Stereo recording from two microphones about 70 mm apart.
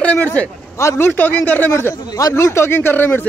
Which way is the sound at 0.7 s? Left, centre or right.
Left.